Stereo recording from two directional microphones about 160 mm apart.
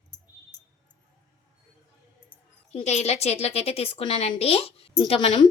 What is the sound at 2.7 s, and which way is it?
Speech, 45° left (ahead or behind).